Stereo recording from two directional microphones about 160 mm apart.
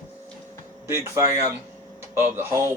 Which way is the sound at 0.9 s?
15° right (ahead or behind).